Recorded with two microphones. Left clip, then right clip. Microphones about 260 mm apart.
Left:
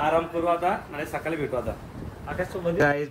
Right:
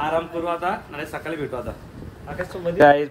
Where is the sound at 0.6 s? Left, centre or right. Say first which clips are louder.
Even; centre.